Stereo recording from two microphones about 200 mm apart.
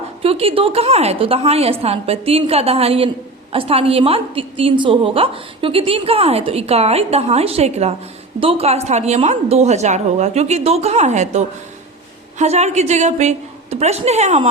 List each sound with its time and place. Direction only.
0.2 s a woman's voice: 30° right (ahead or behind)